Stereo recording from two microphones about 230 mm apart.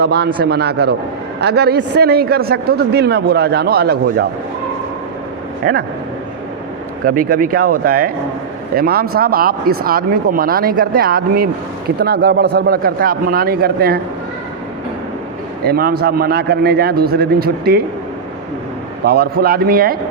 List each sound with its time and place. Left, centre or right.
0.0 s a man's voice: right
5.6 s speech: right
7.0 s a man's voice: right
15.6 s speech: right
19.0 s speech: right